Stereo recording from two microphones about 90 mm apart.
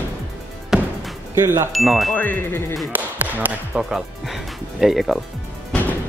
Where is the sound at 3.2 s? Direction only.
20° right (ahead or behind).